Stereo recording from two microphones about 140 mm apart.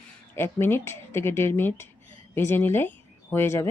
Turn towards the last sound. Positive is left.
turn(degrees=20)  # may be behind; listen again after turning